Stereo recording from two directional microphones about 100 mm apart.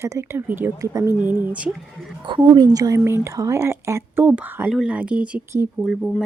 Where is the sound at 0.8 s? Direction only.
30° right (ahead or behind).